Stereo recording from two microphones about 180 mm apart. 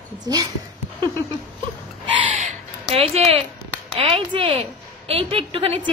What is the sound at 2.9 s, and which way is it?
A woman's voice, 35° right (ahead or behind).